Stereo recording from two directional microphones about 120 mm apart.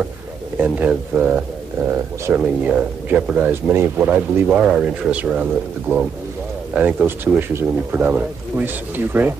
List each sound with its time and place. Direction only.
0.6 s speech: 10° right (ahead or behind)